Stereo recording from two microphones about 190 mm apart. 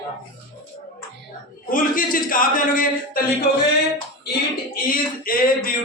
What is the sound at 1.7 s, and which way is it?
A man's voice, 45° left (ahead or behind).